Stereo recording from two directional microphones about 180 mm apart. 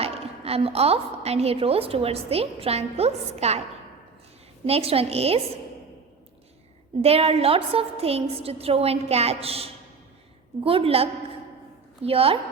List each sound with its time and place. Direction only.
0.0 s a woman's voice: 35° right (ahead or behind)
4.6 s a woman's voice: 35° right (ahead or behind)
7.0 s a woman's voice: 35° right (ahead or behind)